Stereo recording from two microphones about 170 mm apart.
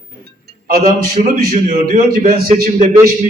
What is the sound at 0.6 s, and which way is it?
A man's voice, 60° right (ahead or behind).